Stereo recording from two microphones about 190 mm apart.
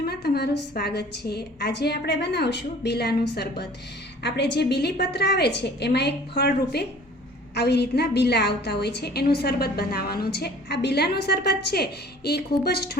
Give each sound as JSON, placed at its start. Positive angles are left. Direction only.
{"t": 0.0, "sound": "a woman's voice", "side_deg": 60}